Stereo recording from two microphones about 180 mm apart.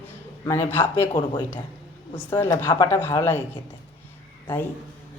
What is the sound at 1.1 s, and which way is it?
Speech, 30° left (ahead or behind).